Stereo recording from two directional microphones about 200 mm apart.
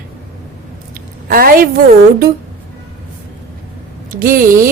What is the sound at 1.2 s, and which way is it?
Speech, 45° right (ahead or behind).